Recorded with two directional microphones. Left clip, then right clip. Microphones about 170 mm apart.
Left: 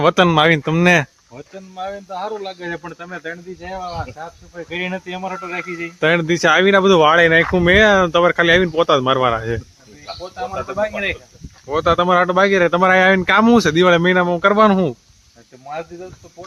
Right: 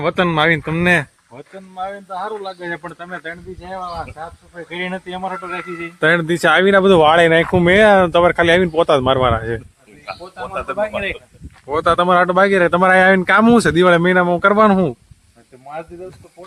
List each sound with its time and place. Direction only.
0.0 s speech: 20° left (ahead or behind); by 2.6 s centre (ahead or behind)
2.6 s speech: 15° right (ahead or behind)
3.6 s speech: centre (ahead or behind)
10.8 s speech: 5° left (ahead or behind)
11.7 s speech: 15° right (ahead or behind)